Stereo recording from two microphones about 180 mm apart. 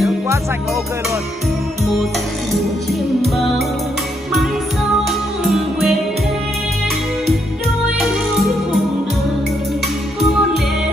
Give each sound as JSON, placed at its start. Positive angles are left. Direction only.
{"t": 2.9, "sound": "music", "side_deg": 0}
{"t": 5.4, "sound": "music", "side_deg": 0}